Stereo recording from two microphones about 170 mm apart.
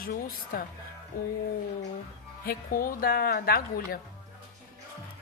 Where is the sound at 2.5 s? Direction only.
60° left (ahead or behind).